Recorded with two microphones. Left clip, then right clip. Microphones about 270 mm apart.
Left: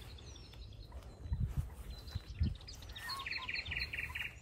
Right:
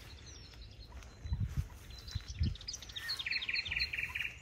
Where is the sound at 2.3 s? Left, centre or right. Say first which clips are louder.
Right 6 dB; left.